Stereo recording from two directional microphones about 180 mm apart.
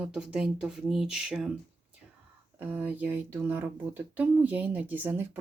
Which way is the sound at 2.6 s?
10° right (ahead or behind).